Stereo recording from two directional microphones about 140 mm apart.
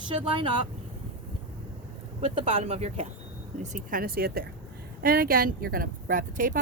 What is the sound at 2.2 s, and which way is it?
Speech, 40° right (ahead or behind).